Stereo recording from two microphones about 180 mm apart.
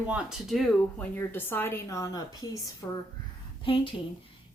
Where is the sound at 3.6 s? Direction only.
30° left (ahead or behind).